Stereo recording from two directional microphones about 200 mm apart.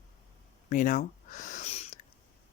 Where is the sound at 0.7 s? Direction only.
40° left (ahead or behind).